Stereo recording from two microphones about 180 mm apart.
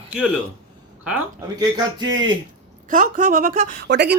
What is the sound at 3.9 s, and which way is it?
Speech, 70° right (ahead or behind).